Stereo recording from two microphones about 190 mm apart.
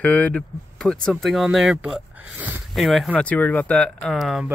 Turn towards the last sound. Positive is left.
turn(degrees=0)  # may be behind; listen again after turning